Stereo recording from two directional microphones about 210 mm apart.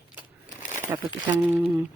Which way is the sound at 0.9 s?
15° right (ahead or behind).